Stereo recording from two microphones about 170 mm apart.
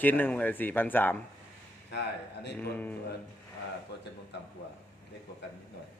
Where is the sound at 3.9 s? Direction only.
90° left.